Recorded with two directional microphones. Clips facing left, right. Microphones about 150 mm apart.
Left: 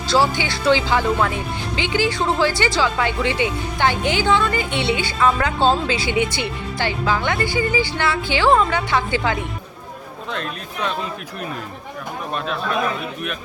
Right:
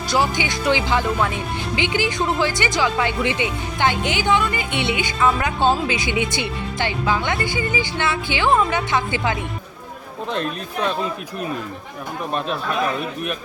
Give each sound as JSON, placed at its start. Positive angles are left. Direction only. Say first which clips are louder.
{"t": 0.1, "sound": "speech", "louder": "left 2 dB", "side_deg": -15}